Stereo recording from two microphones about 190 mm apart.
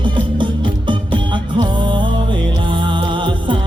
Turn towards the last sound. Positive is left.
turn(degrees=-25)  # may be behind; listen again after turning